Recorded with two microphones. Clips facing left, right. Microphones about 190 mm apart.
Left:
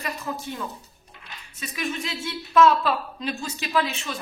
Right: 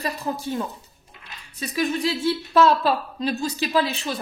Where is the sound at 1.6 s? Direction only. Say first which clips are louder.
Right 7 dB; 35° right (ahead or behind).